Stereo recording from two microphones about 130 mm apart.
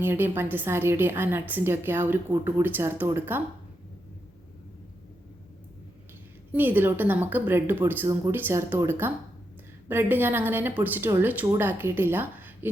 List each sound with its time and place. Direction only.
0.0 s a woman's voice: 15° right (ahead or behind)
6.5 s a woman's voice: 15° right (ahead or behind)